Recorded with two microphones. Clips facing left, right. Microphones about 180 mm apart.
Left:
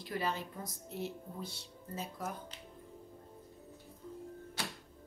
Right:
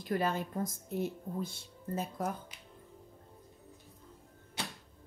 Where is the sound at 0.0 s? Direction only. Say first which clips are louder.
Right 5 dB; 50° right (ahead or behind).